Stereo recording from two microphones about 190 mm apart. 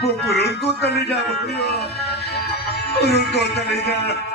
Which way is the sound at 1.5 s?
60° left (ahead or behind).